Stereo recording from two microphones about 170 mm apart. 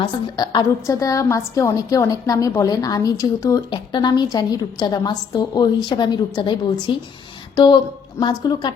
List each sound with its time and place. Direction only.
0.0 s a woman's voice: 25° left (ahead or behind)